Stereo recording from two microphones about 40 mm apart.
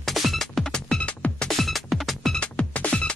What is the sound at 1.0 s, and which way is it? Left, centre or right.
Music, left.